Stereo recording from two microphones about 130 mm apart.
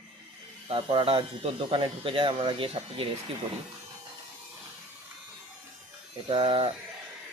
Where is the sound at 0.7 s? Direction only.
45° right (ahead or behind).